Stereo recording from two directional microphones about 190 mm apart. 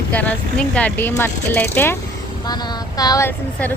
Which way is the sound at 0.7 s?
5° left (ahead or behind).